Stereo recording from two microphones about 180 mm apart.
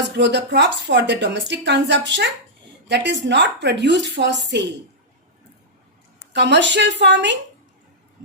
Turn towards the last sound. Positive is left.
turn(degrees=-75)  # may be behind; listen again after turning